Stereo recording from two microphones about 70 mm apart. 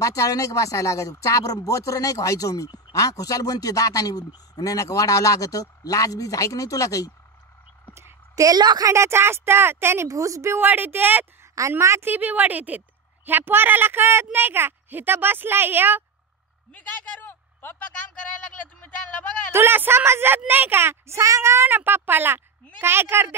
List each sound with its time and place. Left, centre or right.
0.0 s speech: left
8.4 s a woman's voice: right
8.8 s speech: right
10.0 s a woman's voice: right
10.6 s a woman's voice: right
11.6 s a woman's voice: right
12.0 s a woman's voice: right
16.7 s speech: left
19.5 s speech: right